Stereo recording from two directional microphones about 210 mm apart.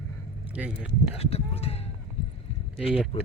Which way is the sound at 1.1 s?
30° left (ahead or behind).